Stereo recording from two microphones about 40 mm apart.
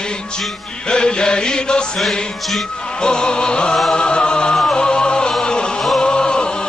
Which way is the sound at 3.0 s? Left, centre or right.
Left.